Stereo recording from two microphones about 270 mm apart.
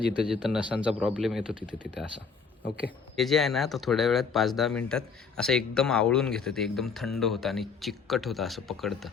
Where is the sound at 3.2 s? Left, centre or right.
Centre.